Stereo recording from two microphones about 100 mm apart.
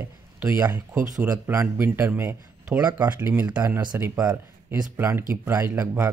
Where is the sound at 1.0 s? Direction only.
30° right (ahead or behind).